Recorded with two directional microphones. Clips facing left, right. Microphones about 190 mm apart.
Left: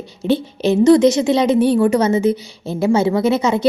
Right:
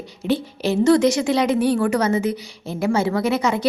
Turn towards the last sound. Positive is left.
turn(degrees=25)  # may be behind; listen again after turning